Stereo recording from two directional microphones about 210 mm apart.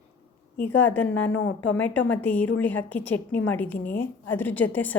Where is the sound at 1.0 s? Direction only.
65° left (ahead or behind).